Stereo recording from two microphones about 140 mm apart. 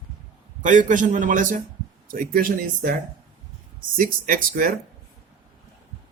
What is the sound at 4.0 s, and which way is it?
Speech, 75° right (ahead or behind).